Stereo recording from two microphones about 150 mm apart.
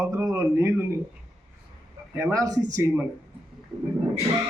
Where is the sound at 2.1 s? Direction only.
20° right (ahead or behind).